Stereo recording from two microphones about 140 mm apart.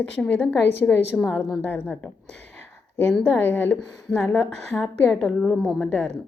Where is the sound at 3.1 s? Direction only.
15° left (ahead or behind).